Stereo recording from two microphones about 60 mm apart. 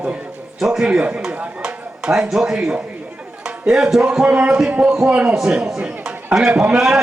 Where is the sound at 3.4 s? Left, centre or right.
Centre.